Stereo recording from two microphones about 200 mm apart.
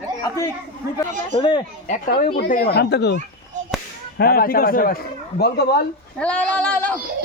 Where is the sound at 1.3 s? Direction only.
25° left (ahead or behind).